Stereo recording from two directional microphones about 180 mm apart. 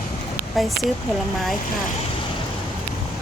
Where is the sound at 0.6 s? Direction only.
Centre (ahead or behind).